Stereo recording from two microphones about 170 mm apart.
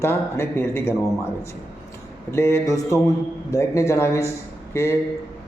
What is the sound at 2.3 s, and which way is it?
A man's voice, 15° left (ahead or behind).